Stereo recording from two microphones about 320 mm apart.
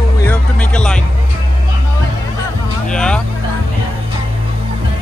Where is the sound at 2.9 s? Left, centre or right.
Centre.